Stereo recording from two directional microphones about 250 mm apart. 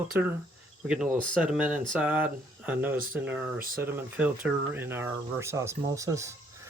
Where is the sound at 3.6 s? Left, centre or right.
Right.